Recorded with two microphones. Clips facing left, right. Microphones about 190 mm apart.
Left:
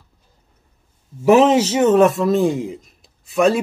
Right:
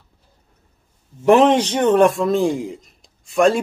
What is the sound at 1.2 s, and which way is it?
A man's voice, 5° left (ahead or behind).